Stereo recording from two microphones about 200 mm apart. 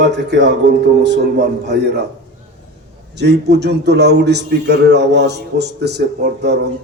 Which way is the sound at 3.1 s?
55° right (ahead or behind).